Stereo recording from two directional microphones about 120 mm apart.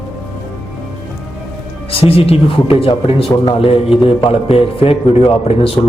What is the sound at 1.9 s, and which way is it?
A man's voice, 50° left (ahead or behind).